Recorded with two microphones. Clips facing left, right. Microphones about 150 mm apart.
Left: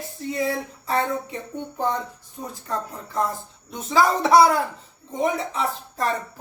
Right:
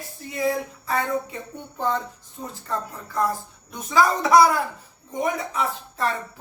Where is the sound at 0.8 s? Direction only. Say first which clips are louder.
Left 1 dB; 25° left (ahead or behind).